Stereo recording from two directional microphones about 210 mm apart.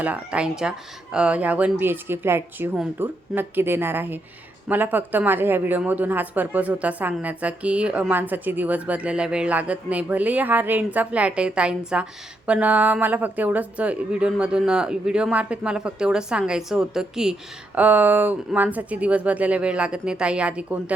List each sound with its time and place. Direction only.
0.0 s speech: 5° right (ahead or behind)